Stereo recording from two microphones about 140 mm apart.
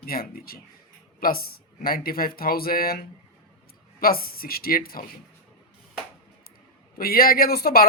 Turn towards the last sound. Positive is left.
turn(degrees=90)